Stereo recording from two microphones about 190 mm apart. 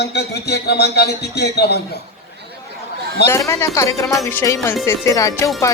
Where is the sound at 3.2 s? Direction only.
15° left (ahead or behind).